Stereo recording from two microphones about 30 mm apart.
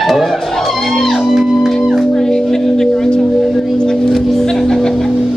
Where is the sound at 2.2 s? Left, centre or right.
Centre.